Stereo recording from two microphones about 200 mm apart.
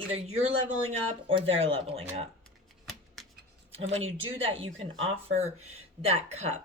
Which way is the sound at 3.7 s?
30° right (ahead or behind).